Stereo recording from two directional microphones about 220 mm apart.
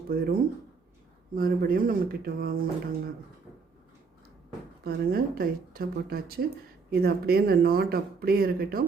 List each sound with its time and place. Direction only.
0.1 s speech: 40° right (ahead or behind)
4.8 s speech: 45° right (ahead or behind)